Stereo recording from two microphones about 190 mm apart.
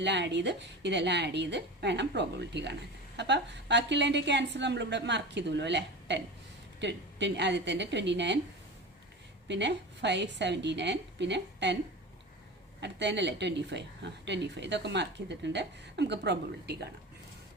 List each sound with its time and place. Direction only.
0.0 s a woman's voice: 65° right (ahead or behind)
9.5 s a woman's voice: 65° right (ahead or behind)
12.8 s a woman's voice: 65° right (ahead or behind)